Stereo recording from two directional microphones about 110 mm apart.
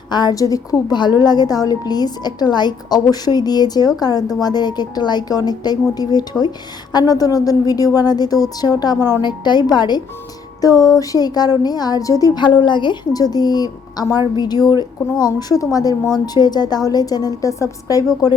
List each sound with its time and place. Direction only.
0.1 s a woman's voice: 40° left (ahead or behind)